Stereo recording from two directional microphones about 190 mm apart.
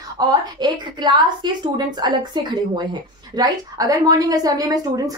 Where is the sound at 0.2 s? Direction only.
20° right (ahead or behind).